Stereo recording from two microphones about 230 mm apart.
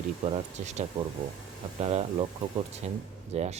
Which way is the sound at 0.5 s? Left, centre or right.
Right.